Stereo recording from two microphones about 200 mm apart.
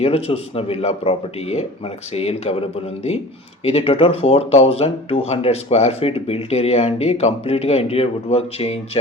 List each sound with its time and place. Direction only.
0.0 s speech: 30° left (ahead or behind)